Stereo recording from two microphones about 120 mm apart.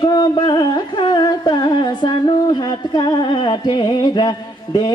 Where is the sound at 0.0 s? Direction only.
35° left (ahead or behind).